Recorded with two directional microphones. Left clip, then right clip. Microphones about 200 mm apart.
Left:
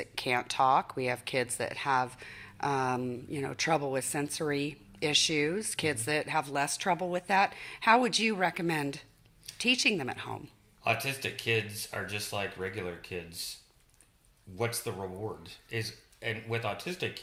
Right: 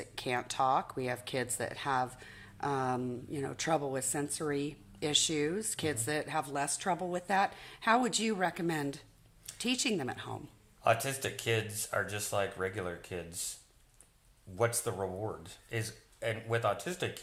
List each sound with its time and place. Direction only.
0.0 s speech: 10° left (ahead or behind)
10.8 s speech: 20° right (ahead or behind)
14.8 s speech: 15° right (ahead or behind)